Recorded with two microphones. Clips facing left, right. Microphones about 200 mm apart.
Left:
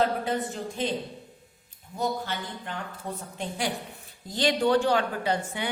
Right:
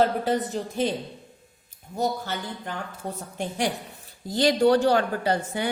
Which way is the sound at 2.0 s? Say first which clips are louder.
Right 2 dB; 45° right (ahead or behind).